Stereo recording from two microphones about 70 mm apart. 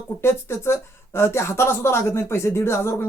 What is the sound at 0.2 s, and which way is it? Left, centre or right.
Speech, left.